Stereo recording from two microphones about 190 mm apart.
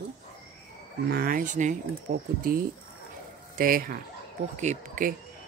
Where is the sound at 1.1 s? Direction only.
50° right (ahead or behind).